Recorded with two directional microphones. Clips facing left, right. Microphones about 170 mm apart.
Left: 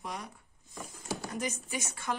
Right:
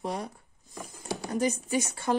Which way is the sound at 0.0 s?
30° right (ahead or behind).